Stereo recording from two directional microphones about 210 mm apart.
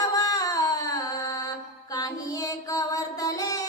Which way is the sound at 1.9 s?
15° left (ahead or behind).